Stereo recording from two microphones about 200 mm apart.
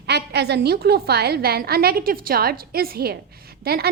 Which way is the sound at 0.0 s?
55° right (ahead or behind).